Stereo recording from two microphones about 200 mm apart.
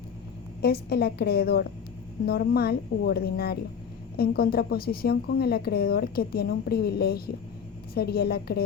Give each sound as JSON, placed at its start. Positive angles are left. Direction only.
{"t": 0.6, "sound": "a woman's voice", "side_deg": 55}